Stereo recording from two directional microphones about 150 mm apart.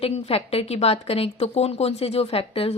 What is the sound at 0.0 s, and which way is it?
A woman's voice, 40° left (ahead or behind).